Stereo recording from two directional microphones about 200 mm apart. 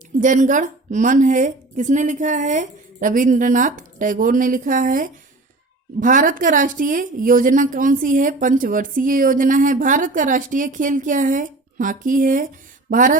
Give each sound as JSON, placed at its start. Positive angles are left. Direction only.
{"t": 0.2, "sound": "a woman's voice", "side_deg": -40}